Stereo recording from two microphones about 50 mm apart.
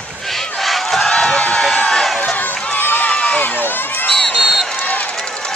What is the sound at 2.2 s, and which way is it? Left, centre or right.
Run, left.